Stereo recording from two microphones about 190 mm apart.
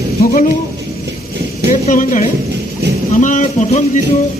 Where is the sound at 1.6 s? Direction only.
45° left (ahead or behind).